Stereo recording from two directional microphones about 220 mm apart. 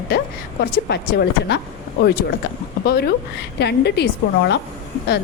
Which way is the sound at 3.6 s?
50° left (ahead or behind).